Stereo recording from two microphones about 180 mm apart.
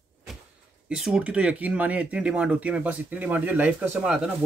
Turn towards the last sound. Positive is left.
turn(degrees=-10)  # may be behind; listen again after turning